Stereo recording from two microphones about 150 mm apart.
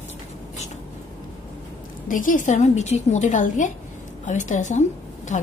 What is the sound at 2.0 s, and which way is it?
A woman's voice, 65° left (ahead or behind).